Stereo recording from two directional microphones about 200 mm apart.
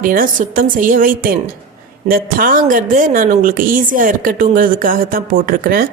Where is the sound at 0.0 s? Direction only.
45° right (ahead or behind).